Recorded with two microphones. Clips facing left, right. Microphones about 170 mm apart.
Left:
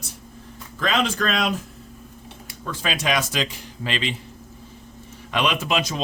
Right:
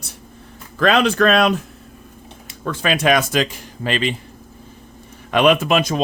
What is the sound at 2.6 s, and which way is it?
Speech, 60° right (ahead or behind).